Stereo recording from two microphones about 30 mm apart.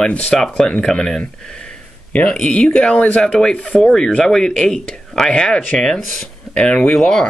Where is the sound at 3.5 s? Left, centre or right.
Left.